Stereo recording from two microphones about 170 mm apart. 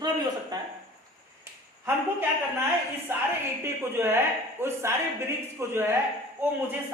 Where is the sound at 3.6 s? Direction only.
15° right (ahead or behind).